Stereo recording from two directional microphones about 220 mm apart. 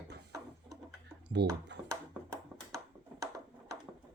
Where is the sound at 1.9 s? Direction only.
15° right (ahead or behind).